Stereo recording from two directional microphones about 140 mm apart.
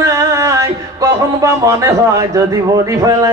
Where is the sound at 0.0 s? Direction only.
20° right (ahead or behind).